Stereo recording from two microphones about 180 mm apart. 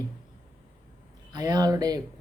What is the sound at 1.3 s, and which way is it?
Speech, 20° right (ahead or behind).